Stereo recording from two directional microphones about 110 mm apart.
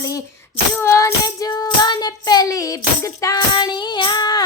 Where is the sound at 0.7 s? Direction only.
25° left (ahead or behind).